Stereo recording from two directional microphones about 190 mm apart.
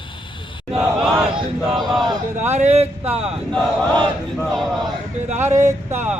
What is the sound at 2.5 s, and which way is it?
Speech, 35° right (ahead or behind).